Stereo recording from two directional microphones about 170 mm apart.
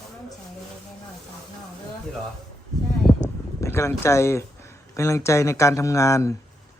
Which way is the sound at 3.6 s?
15° left (ahead or behind).